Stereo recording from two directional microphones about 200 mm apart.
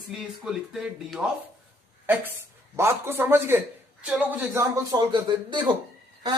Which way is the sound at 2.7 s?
10° right (ahead or behind).